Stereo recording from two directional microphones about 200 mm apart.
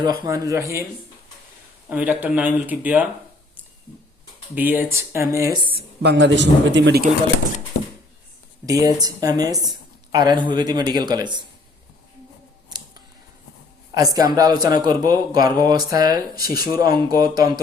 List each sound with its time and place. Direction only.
0.0 s speech: 20° right (ahead or behind)
1.9 s speech: 5° right (ahead or behind)
4.5 s speech: 10° right (ahead or behind)
6.0 s a man's voice: 60° right (ahead or behind)
8.6 s speech: 20° right (ahead or behind)
13.9 s speech: 20° right (ahead or behind)